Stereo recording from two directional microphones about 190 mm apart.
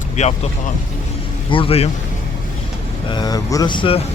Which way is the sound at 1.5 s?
30° left (ahead or behind).